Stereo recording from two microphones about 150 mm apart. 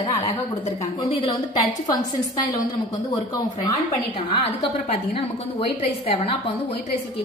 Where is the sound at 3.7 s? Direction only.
40° left (ahead or behind).